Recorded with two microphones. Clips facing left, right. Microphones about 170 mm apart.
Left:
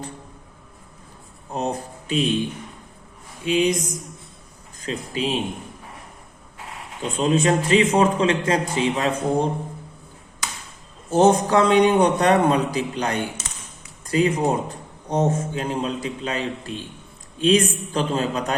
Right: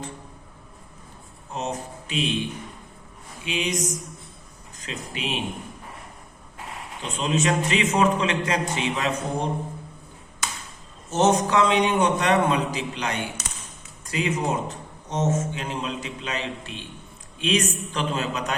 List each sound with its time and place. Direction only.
1.5 s a man's voice: 35° left (ahead or behind)
3.4 s a man's voice: 35° left (ahead or behind)
4.8 s a man's voice: 35° left (ahead or behind)
7.2 s a man's voice: 35° left (ahead or behind)
11.1 s a man's voice: 30° left (ahead or behind)